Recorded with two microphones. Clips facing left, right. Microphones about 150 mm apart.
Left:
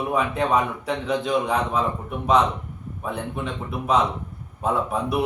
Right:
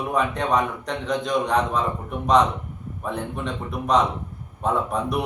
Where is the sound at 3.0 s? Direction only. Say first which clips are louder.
Even; 5° left (ahead or behind).